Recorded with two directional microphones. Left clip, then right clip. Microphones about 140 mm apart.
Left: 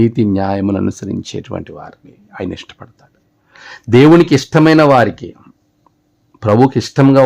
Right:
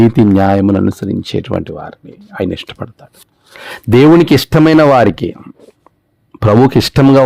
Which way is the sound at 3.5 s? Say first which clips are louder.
Right 1 dB; 55° right (ahead or behind).